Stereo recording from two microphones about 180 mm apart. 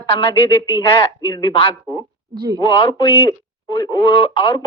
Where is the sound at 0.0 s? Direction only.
30° left (ahead or behind).